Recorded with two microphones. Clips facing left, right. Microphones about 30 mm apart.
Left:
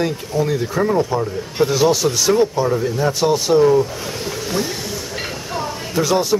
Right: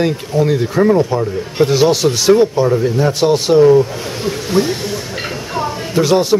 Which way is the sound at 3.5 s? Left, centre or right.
Centre.